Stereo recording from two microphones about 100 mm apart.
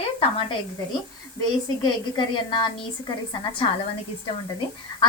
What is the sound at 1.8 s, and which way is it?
A woman's voice, 50° left (ahead or behind).